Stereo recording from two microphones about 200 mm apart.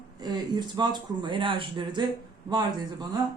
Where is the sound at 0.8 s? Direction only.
20° right (ahead or behind).